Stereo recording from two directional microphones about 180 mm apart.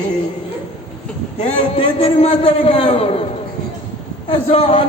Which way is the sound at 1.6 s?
30° left (ahead or behind).